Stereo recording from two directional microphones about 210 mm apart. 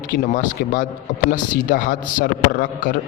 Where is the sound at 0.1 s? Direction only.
40° left (ahead or behind).